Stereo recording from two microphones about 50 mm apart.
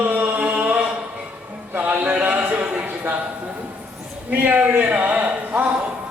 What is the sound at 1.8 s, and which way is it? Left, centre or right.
Music, right.